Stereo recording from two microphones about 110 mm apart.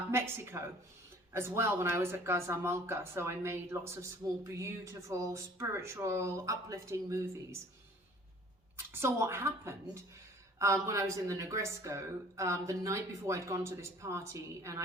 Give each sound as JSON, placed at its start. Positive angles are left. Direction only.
{"t": 0.1, "sound": "speech", "side_deg": -20}
{"t": 8.9, "sound": "speech", "side_deg": -20}